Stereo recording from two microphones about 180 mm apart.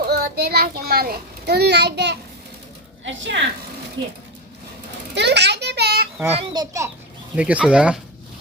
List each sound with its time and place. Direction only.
0.0 s a child's voice: 60° right (ahead or behind)
3.0 s a woman's voice: 85° right
4.0 s a child's voice: 25° right (ahead or behind)
5.1 s a sound: 70° right (ahead or behind)
6.3 s a child's voice: 25° right (ahead or behind)
7.3 s speech: 5° right (ahead or behind)